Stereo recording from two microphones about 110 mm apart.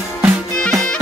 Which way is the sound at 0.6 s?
5° left (ahead or behind).